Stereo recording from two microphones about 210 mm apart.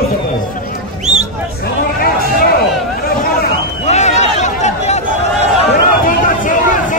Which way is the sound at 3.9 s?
35° left (ahead or behind).